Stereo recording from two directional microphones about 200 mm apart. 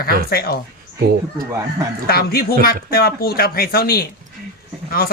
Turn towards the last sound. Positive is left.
turn(degrees=50)  # may be behind; listen again after turning